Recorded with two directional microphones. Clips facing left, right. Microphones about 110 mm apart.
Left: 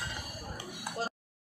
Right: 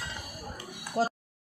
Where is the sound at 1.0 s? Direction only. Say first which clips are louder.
Right 9 dB; 85° right.